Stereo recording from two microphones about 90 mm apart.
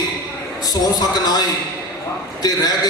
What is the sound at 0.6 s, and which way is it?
A man's voice, 45° left (ahead or behind).